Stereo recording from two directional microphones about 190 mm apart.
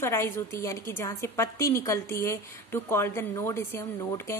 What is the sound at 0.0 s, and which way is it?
A woman's voice, 15° left (ahead or behind).